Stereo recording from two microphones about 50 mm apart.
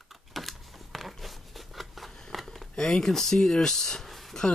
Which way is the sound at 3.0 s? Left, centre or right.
Centre.